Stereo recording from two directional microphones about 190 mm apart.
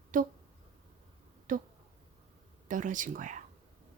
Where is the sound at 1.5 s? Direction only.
45° right (ahead or behind).